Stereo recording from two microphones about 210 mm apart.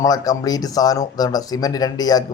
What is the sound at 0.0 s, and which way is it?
Speech, 15° left (ahead or behind).